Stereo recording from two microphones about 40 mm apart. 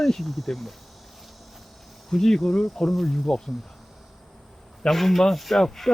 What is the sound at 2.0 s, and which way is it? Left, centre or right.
Speech, centre.